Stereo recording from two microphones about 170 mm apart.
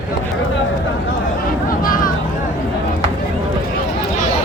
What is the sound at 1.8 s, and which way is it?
Vehicle, 55° left (ahead or behind).